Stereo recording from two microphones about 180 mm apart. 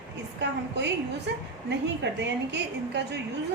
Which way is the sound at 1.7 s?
75° right (ahead or behind).